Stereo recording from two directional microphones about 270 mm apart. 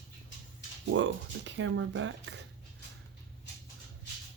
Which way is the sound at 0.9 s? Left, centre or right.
Right.